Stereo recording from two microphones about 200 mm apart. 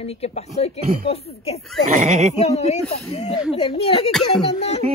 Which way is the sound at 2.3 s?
35° left (ahead or behind).